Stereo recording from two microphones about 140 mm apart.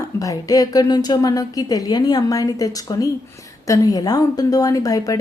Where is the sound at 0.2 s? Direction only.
25° left (ahead or behind).